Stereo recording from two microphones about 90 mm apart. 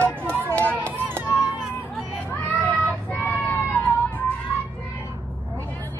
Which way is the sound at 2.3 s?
15° left (ahead or behind).